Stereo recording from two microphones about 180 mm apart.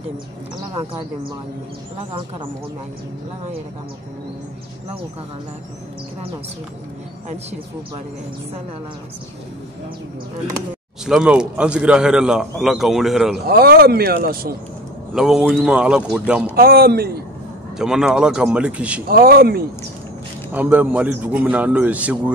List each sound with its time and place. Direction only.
11.1 s a man's voice: 5° right (ahead or behind)
13.5 s speech: 60° right (ahead or behind)
15.1 s a man's voice: 5° right (ahead or behind)
16.5 s speech: 55° right (ahead or behind)
17.7 s a man's voice: 5° right (ahead or behind)
19.0 s speech: 60° right (ahead or behind)
20.5 s a man's voice: 10° right (ahead or behind)